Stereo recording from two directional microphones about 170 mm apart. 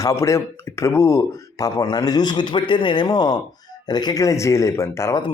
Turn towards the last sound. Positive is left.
turn(degrees=15)  # may be behind; listen again after turning